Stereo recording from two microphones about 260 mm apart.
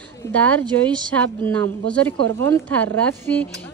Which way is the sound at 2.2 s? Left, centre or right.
Right.